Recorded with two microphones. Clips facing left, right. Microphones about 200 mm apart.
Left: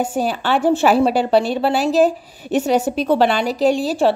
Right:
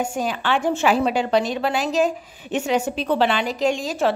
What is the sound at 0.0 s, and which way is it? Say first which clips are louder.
A woman's voice: left 4 dB; 35° left (ahead or behind).